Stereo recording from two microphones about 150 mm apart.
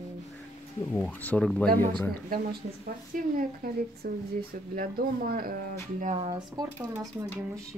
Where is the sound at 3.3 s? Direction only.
80° right.